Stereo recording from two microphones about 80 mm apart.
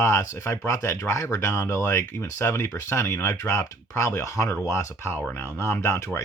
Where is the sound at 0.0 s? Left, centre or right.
Left.